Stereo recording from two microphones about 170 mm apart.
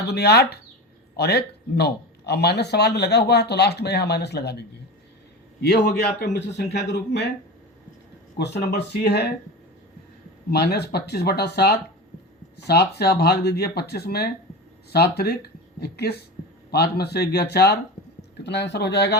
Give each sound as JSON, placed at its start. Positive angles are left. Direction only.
{"t": 0.1, "sound": "a man's voice", "side_deg": 75}
{"t": 5.6, "sound": "a man's voice", "side_deg": 75}
{"t": 8.4, "sound": "a man's voice", "side_deg": 75}
{"t": 10.5, "sound": "a man's voice", "side_deg": 75}
{"t": 18.4, "sound": "a man's voice", "side_deg": 85}